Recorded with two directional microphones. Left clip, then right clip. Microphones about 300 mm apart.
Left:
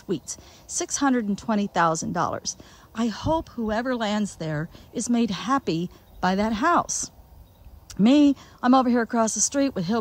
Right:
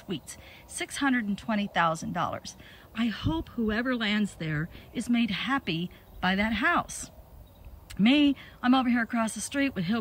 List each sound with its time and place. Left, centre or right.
0.1 s speech: centre